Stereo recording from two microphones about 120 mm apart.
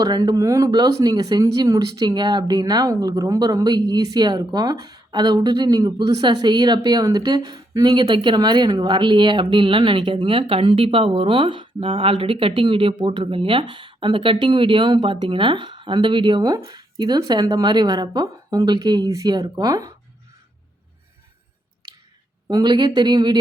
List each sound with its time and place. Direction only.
0.0 s speech: 35° right (ahead or behind)
22.4 s speech: 35° right (ahead or behind)